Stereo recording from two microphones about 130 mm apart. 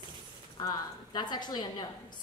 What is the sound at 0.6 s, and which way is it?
A woman's voice, 35° left (ahead or behind).